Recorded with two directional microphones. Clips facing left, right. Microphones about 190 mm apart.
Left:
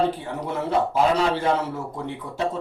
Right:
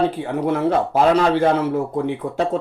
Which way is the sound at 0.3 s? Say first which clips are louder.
Right 7 dB; 75° right (ahead or behind).